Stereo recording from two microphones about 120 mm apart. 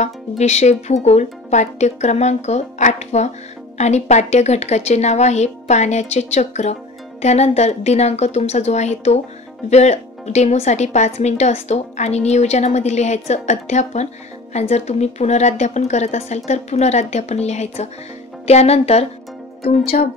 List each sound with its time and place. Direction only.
0.0 s a woman's voice: 70° left (ahead or behind)